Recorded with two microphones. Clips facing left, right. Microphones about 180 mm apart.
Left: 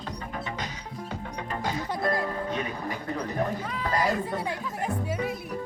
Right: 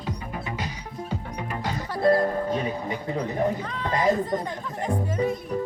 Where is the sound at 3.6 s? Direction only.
5° left (ahead or behind).